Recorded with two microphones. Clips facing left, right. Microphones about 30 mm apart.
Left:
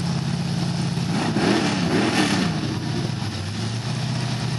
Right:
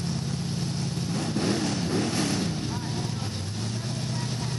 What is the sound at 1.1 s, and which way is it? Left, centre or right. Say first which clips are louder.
Vehicle: left 7 dB; left.